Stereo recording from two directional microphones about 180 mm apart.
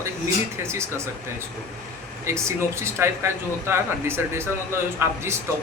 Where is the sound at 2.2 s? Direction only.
15° right (ahead or behind).